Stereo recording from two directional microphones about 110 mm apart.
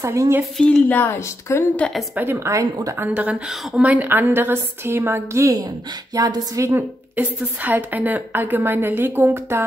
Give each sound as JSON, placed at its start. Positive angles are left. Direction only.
{"t": 0.0, "sound": "a woman's voice", "side_deg": -25}
{"t": 0.6, "sound": "a woman's voice", "side_deg": 5}
{"t": 1.8, "sound": "a woman's voice", "side_deg": 5}
{"t": 2.1, "sound": "a woman's voice", "side_deg": -20}
{"t": 3.1, "sound": "a woman's voice", "side_deg": -15}
{"t": 7.2, "sound": "a woman's voice", "side_deg": -15}